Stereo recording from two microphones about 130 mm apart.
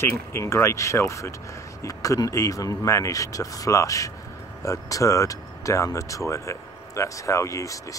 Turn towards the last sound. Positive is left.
turn(degrees=25)  # may be behind; listen again after turning